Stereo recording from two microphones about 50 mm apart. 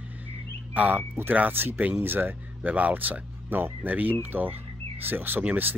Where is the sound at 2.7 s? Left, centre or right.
Right.